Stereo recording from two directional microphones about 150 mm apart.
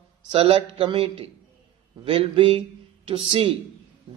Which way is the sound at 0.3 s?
40° right (ahead or behind).